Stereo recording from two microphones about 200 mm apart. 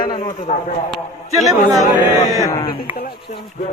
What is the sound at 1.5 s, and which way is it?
Speech, 20° right (ahead or behind).